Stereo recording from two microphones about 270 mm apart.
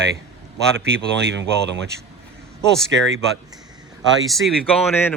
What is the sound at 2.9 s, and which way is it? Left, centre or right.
Speech, right.